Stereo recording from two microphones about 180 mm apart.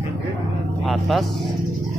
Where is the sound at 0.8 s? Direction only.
Centre (ahead or behind).